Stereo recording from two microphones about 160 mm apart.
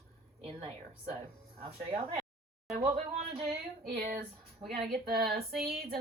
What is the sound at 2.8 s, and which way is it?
Speech, 40° right (ahead or behind).